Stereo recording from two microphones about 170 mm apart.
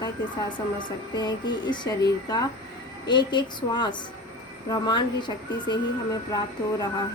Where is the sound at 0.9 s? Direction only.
25° left (ahead or behind).